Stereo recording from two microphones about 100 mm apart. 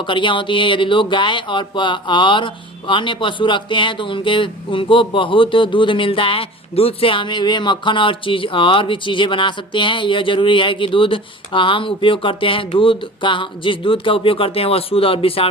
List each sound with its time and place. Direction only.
0.0 s speech: 55° left (ahead or behind)